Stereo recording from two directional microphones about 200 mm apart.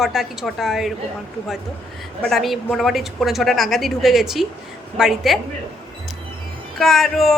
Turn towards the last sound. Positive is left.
turn(degrees=0)  # may be behind; listen again after turning